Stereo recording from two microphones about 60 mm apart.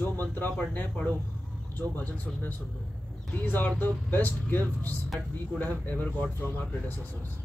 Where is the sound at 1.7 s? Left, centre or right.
Left.